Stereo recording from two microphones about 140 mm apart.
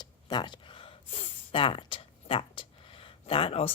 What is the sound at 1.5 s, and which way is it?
Speech, 40° left (ahead or behind).